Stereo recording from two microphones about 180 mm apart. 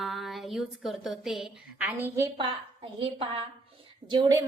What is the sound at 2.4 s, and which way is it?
A woman's voice, 30° right (ahead or behind).